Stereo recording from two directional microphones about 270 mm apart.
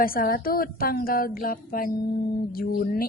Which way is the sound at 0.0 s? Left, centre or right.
Left.